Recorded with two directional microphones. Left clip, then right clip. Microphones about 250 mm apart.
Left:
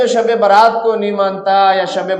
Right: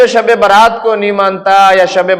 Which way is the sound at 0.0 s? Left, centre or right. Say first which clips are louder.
Right 5 dB; right.